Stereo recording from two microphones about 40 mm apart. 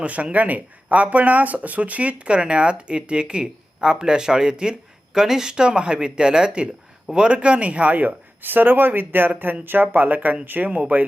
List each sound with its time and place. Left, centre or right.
0.0 s speech: right
10.7 s speech: right